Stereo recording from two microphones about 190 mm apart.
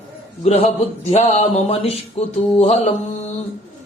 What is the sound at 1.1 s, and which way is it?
Mantra, 35° left (ahead or behind).